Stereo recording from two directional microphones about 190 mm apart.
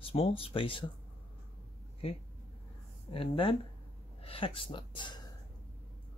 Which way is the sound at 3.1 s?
30° left (ahead or behind).